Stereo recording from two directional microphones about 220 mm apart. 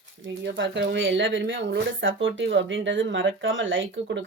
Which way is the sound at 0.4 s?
55° right (ahead or behind).